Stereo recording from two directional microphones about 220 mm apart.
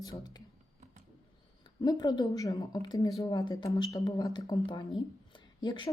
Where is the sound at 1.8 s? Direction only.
20° left (ahead or behind).